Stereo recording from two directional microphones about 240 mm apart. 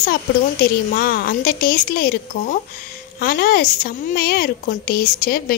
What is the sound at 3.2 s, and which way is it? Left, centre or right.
A woman's voice, left.